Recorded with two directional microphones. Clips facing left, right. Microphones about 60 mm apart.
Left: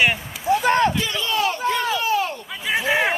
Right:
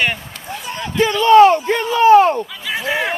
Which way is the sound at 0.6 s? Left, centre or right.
Left.